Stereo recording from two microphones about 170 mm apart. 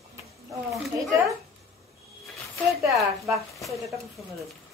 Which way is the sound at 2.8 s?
Centre (ahead or behind).